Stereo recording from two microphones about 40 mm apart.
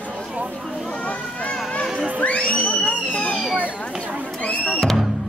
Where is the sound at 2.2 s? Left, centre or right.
Left.